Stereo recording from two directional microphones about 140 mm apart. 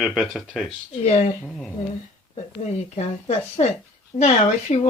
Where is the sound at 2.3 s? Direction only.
50° left (ahead or behind).